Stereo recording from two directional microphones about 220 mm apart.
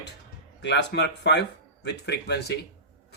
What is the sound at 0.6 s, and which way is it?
Speech, 50° left (ahead or behind).